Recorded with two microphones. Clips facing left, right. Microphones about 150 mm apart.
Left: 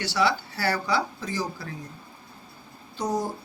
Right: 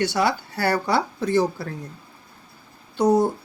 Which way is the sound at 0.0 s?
55° right (ahead or behind).